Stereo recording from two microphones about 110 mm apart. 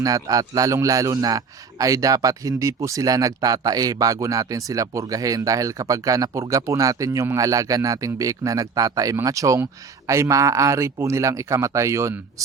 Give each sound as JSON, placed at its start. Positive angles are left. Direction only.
{"t": 0.0, "sound": "a man's voice", "side_deg": -35}